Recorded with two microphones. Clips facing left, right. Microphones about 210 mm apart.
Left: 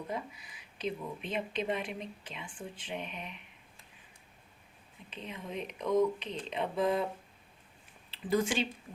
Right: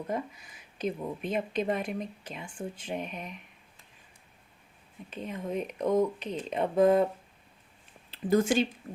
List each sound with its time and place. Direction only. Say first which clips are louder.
0.1 s speech: right 5 dB; 45° right (ahead or behind)
5.1 s speech: right 7 dB; 45° right (ahead or behind)
8.1 s speech: right 6 dB; 45° right (ahead or behind)